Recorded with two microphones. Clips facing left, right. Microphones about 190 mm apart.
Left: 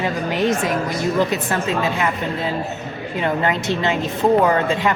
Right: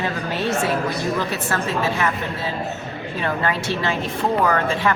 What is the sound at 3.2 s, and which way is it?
A woman's voice, 20° left (ahead or behind).